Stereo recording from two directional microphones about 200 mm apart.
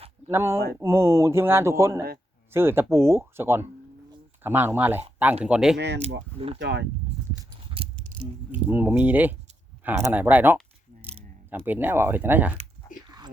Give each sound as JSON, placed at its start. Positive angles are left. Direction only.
{"t": 0.3, "sound": "speech", "side_deg": -10}
{"t": 5.7, "sound": "speech", "side_deg": -60}
{"t": 6.0, "sound": "speech", "side_deg": -30}
{"t": 6.6, "sound": "speech", "side_deg": -60}
{"t": 7.7, "sound": "a sound", "side_deg": -25}
{"t": 8.5, "sound": "speech", "side_deg": -10}